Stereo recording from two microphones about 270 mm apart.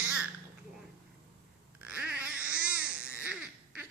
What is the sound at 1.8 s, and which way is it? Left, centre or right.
Babbling, centre.